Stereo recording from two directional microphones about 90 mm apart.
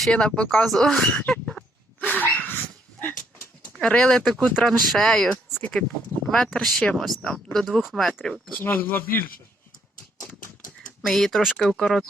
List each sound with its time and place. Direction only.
0.0 s speech: 10° left (ahead or behind)
2.0 s dog: 15° left (ahead or behind)
3.6 s speech: 10° left (ahead or behind)
5.5 s a sound: 25° left (ahead or behind)
6.3 s speech: centre (ahead or behind)
8.6 s speech: 20° left (ahead or behind)
11.0 s speech: 5° left (ahead or behind)